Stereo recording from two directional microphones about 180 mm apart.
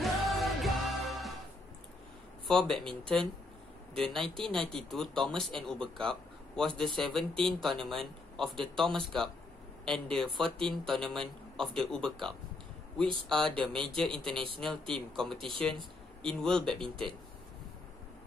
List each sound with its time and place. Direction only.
0.0 s music: centre (ahead or behind)
2.4 s speech: 5° left (ahead or behind)
15.3 s speech: 30° right (ahead or behind)
16.2 s speech: 5° left (ahead or behind)